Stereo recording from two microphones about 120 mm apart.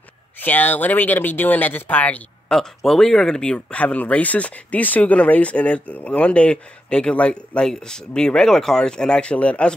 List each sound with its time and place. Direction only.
0.4 s speech: 15° left (ahead or behind)